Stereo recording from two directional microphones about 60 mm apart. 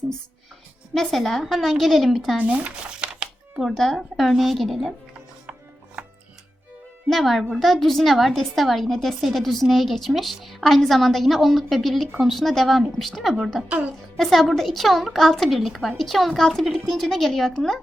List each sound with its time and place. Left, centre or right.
0.9 s a woman's voice: centre
2.4 s a sound: right
3.6 s a woman's voice: centre
7.1 s a woman's voice: centre
13.7 s speech: right
14.2 s a woman's voice: centre